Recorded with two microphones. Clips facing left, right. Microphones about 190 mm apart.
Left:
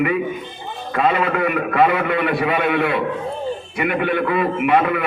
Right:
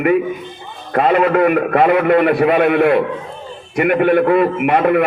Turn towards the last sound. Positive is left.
turn(degrees=-50)  # may be behind; listen again after turning